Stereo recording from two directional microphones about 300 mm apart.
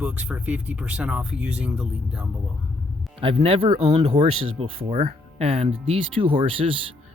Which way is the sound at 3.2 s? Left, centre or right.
Centre.